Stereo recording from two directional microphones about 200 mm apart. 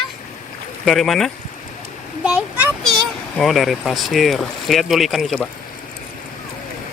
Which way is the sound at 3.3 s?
Centre (ahead or behind).